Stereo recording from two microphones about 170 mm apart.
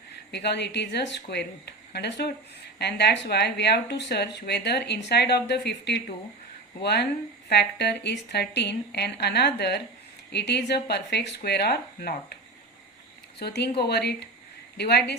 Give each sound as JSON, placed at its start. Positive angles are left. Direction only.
{"t": 0.3, "sound": "a woman's voice", "side_deg": 85}
{"t": 13.4, "sound": "speech", "side_deg": 75}